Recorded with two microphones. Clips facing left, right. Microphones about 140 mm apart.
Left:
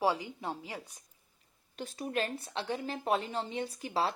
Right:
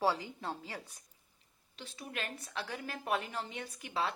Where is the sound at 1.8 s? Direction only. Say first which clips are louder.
Left 9 dB; 45° left (ahead or behind).